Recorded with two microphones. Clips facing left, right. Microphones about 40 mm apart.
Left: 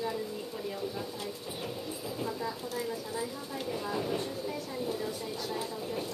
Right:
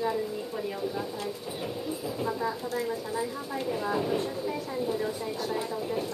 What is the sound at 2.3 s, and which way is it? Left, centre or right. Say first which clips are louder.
A woman's voice: right 5 dB; centre.